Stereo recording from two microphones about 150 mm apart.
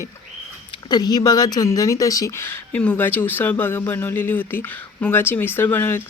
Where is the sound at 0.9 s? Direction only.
25° left (ahead or behind).